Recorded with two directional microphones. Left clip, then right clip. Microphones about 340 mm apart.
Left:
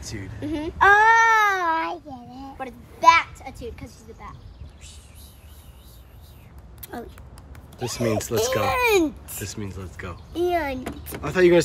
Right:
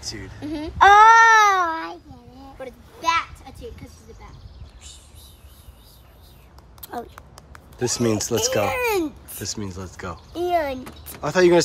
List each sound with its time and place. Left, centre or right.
0.0 s speech: centre
0.7 s baby cry: right
1.5 s child singing: centre
3.0 s a sound: centre
6.8 s speech: centre